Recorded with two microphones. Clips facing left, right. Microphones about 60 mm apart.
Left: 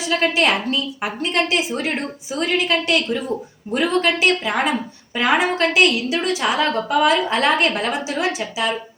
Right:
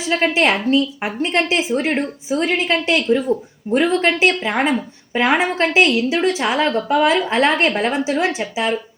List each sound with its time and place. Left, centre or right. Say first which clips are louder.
0.1 s a woman's voice: right 2 dB; right
3.2 s speech: right 5 dB; centre
4.0 s a woman's voice: right 2 dB; right